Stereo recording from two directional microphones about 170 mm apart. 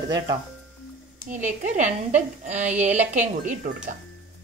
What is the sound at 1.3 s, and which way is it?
A woman's voice, 45° right (ahead or behind).